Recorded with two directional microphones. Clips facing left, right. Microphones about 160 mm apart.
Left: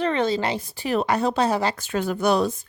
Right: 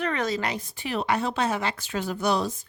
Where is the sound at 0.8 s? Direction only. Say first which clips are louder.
Left 4 dB; 40° left (ahead or behind); by 2.5 s 55° left (ahead or behind).